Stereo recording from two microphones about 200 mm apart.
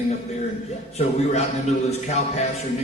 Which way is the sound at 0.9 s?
30° left (ahead or behind).